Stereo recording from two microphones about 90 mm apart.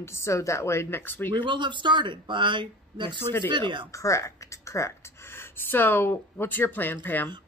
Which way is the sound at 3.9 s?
35° left (ahead or behind).